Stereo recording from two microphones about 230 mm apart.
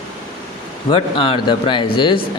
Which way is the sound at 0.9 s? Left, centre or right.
Left.